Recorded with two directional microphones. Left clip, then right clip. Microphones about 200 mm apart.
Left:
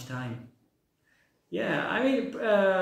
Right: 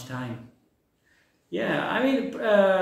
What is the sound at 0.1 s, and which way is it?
Speech, centre (ahead or behind).